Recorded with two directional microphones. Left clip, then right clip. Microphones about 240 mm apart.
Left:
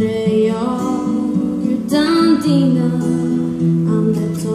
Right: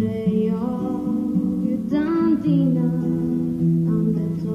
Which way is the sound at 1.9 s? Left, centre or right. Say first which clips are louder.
Left 7 dB; left.